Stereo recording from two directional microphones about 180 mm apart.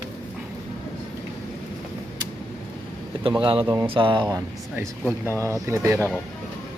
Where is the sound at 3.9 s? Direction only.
30° right (ahead or behind).